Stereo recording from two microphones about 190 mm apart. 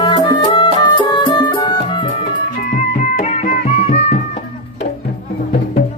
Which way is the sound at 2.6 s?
45° left (ahead or behind).